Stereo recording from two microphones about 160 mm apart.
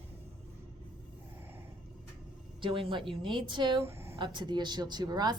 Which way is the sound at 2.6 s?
30° right (ahead or behind).